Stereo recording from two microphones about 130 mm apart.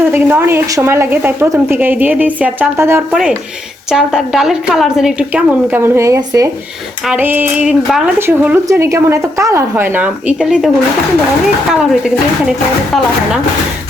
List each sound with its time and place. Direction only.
0.0 s a woman's voice: 15° right (ahead or behind)
3.1 s a woman's voice: 5° right (ahead or behind); by 6.5 s 25° right (ahead or behind)
7.1 s a woman's voice: 15° right (ahead or behind)
8.3 s a woman's voice: 15° right (ahead or behind)
12.5 s speech: 5° right (ahead or behind)